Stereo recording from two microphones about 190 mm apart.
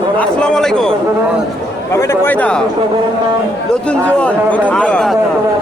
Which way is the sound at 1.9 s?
15° left (ahead or behind).